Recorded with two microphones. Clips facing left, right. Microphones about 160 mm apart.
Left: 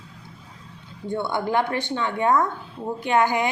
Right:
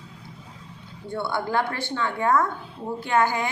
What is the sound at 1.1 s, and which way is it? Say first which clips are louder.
A woman's voice: left 2 dB; 20° left (ahead or behind).